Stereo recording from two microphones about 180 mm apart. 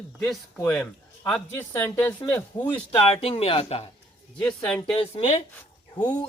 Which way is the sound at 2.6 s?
30° left (ahead or behind).